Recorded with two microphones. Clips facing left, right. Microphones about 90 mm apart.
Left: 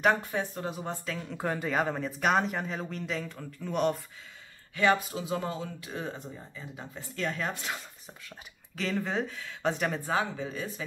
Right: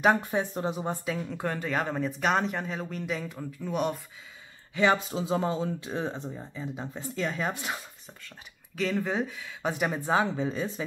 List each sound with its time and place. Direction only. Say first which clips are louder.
0.3 s speech: right 4 dB; 25° right (ahead or behind)
0.8 s speech: right 4 dB; 10° right (ahead or behind)
1.2 s speech: even; 5° left (ahead or behind)
4.7 s speech: right 1 dB; 25° right (ahead or behind)
8.1 s speech: left 1 dB; 5° left (ahead or behind); by 10.0 s 10° right (ahead or behind)
10.0 s speech: right 4 dB; 25° right (ahead or behind)